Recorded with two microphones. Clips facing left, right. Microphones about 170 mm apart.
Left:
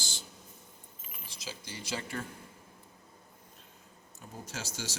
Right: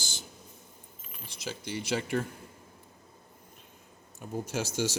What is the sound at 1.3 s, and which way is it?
Speech, 60° right (ahead or behind).